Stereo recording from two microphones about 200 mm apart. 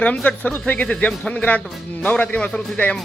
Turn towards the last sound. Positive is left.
turn(degrees=5)  # may be behind; listen again after turning